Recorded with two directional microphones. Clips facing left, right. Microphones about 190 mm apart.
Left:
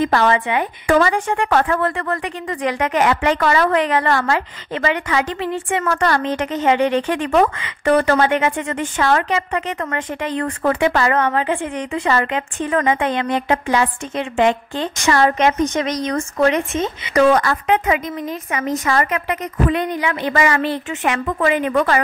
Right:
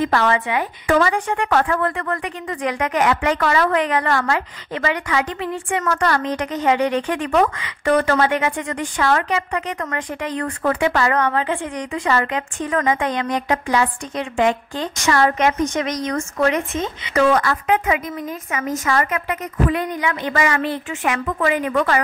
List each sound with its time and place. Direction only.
0.0 s a woman's voice: 30° left (ahead or behind)
17.1 s a woman's voice: 40° left (ahead or behind)
20.3 s a woman's voice: 30° left (ahead or behind)